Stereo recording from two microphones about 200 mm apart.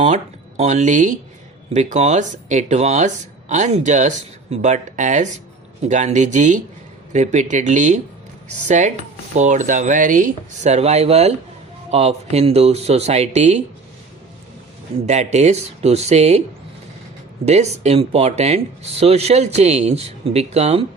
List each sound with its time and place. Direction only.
0.0 s speech: 35° right (ahead or behind)
15.0 s speech: 35° right (ahead or behind)
17.4 s speech: 30° right (ahead or behind)